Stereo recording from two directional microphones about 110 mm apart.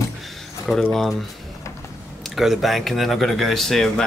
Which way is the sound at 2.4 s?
Centre (ahead or behind).